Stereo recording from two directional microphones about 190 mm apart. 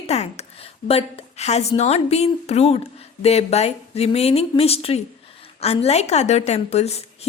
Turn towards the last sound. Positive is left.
turn(degrees=35)  # may be behind; listen again after turning